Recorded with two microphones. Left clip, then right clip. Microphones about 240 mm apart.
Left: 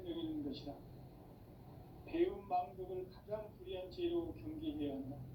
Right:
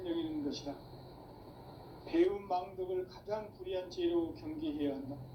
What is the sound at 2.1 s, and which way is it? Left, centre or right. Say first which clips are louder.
A man's voice: right 6 dB; right.